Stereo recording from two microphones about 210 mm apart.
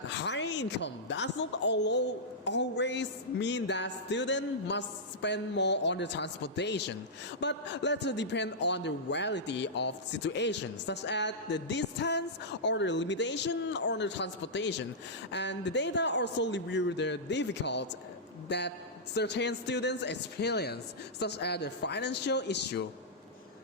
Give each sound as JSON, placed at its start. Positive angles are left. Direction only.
{"t": 0.1, "sound": "a woman's voice", "side_deg": 55}